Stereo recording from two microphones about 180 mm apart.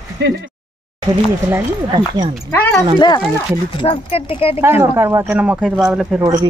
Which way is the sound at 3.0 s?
25° left (ahead or behind).